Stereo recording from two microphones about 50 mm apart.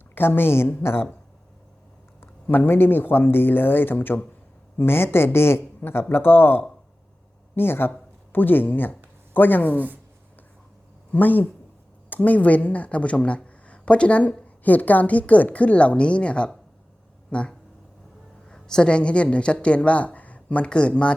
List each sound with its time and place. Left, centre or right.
0.1 s a woman's voice: left
2.5 s a man's voice: left
4.8 s a man's voice: left
11.1 s a woman's voice: left
18.4 s speech: centre